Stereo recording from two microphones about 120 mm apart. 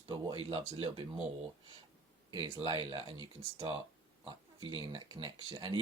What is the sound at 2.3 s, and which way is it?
Speech, 35° right (ahead or behind).